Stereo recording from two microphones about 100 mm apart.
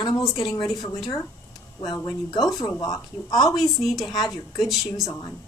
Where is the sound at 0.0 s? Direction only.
40° left (ahead or behind).